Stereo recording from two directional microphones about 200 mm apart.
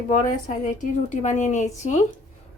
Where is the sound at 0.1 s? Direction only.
40° left (ahead or behind).